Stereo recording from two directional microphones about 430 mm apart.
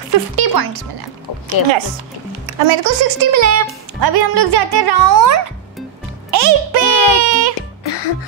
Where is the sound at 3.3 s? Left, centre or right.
Right.